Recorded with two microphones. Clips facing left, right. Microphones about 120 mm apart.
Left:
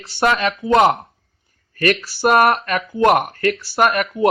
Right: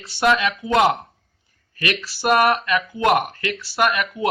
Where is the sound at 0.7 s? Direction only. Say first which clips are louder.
Left 4 dB; 35° left (ahead or behind); by 3.1 s 50° left (ahead or behind).